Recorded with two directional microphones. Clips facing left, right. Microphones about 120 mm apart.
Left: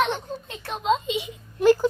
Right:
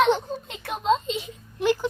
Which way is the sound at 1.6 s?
40° left (ahead or behind).